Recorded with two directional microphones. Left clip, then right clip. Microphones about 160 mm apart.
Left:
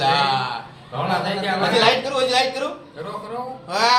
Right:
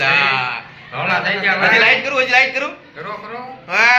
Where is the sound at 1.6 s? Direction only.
Centre (ahead or behind).